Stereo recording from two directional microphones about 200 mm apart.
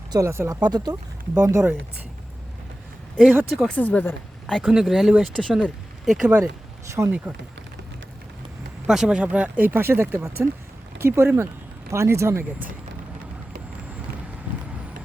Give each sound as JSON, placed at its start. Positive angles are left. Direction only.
{"t": 0.1, "sound": "speech", "side_deg": -15}
{"t": 3.2, "sound": "speech", "side_deg": -5}
{"t": 8.9, "sound": "speech", "side_deg": -5}